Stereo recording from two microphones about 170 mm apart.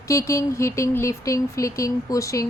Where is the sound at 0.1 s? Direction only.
15° left (ahead or behind).